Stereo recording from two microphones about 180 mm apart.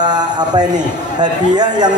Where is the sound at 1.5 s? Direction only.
25° right (ahead or behind).